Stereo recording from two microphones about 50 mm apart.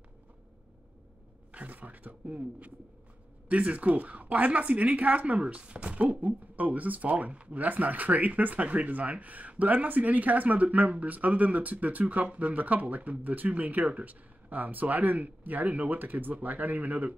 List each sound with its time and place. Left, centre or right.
1.5 s speech: right